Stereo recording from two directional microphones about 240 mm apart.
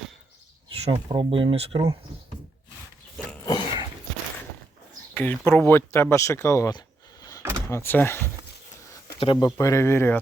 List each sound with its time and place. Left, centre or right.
0.7 s speech: centre
3.4 s dog: centre
5.1 s speech: centre
7.3 s vehicle: centre
9.1 s speech: left